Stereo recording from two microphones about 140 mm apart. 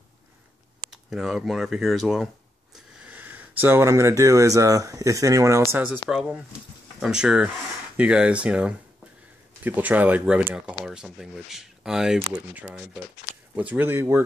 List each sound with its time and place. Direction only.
0.8 s speech: 5° right (ahead or behind); by 14.2 s 20° right (ahead or behind)